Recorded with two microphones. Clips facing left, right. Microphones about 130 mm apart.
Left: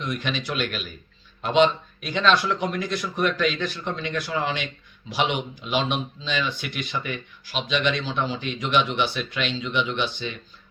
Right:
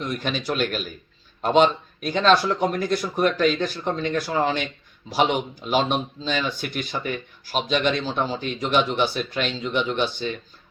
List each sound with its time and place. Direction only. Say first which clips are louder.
0.0 s speech: right 2 dB; 40° right (ahead or behind)